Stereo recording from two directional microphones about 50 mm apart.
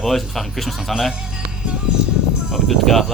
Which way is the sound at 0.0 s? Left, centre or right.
Centre.